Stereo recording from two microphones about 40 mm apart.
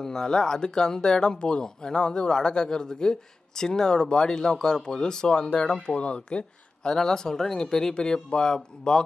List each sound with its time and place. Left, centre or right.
0.0 s speech: centre
6.9 s speech: centre